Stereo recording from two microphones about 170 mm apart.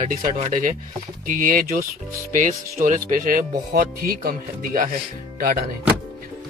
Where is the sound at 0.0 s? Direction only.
45° right (ahead or behind).